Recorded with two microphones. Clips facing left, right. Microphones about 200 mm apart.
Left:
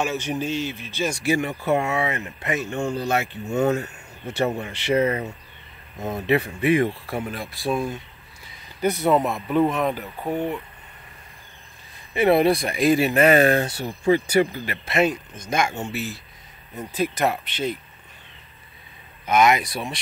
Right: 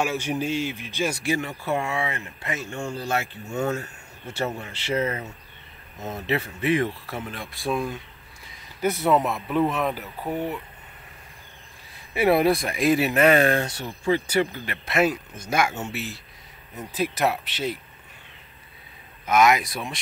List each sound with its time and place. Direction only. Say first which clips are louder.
0.0 s speech: even; 10° right (ahead or behind)
1.2 s speech: left 4 dB; 15° left (ahead or behind); by 10.6 s 5° right (ahead or behind)
12.1 s speech: left 2 dB; 5° right (ahead or behind); by 14.8 s 10° left (ahead or behind)
14.9 s speech: left 1 dB; 5° right (ahead or behind)
19.2 s speech: left 1 dB; centre (ahead or behind)